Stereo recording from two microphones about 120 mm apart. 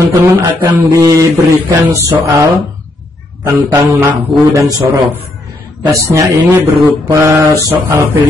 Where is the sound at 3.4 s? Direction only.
20° right (ahead or behind).